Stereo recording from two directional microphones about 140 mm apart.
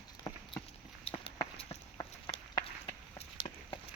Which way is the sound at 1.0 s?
40° left (ahead or behind).